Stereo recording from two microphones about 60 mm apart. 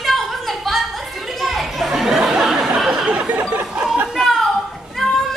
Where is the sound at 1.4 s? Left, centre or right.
Centre.